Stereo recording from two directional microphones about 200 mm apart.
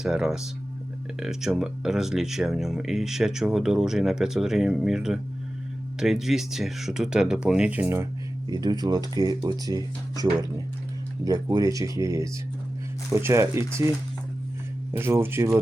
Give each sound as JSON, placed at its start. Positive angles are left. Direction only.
{"t": 0.0, "sound": "speech", "side_deg": 0}
{"t": 8.4, "sound": "speech", "side_deg": -20}
{"t": 11.3, "sound": "speech", "side_deg": -20}
{"t": 14.9, "sound": "speech", "side_deg": -10}